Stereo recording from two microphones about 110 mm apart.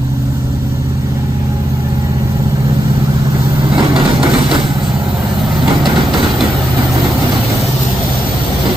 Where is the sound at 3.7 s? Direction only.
55° right (ahead or behind).